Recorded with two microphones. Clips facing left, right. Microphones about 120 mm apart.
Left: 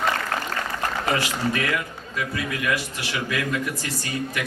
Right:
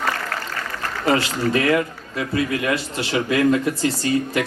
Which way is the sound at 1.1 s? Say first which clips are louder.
Right 8 dB; 30° right (ahead or behind).